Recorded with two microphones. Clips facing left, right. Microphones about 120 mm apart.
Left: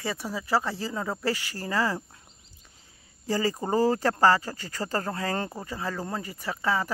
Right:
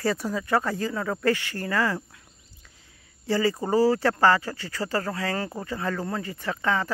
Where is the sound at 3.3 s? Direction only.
40° left (ahead or behind).